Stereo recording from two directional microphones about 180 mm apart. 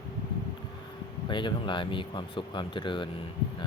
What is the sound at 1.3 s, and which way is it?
Speech, 25° left (ahead or behind).